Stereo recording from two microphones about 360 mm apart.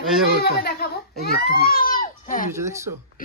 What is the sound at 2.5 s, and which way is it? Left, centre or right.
Speech, centre.